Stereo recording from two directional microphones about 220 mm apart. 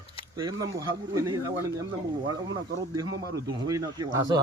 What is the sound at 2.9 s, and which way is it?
Speech, 15° right (ahead or behind).